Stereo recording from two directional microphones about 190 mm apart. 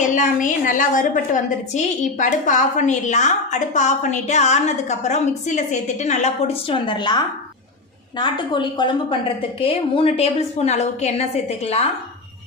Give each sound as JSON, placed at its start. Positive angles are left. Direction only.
{"t": 0.1, "sound": "a woman's voice", "side_deg": 45}
{"t": 8.2, "sound": "a woman's voice", "side_deg": 25}